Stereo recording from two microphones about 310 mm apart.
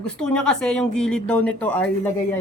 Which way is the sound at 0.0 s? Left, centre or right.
Centre.